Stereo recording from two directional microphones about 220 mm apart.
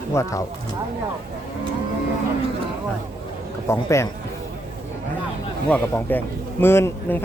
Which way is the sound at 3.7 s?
10° left (ahead or behind).